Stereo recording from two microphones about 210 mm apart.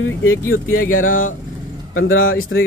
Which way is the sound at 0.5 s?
85° left.